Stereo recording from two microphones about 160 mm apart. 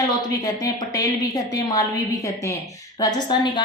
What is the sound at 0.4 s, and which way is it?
A woman's voice, 20° left (ahead or behind).